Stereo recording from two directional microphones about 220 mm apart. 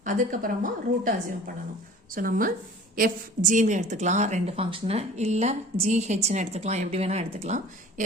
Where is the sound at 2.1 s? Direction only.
40° right (ahead or behind).